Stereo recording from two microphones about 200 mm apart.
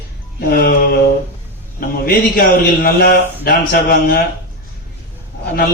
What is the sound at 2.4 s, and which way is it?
Speech, 50° left (ahead or behind).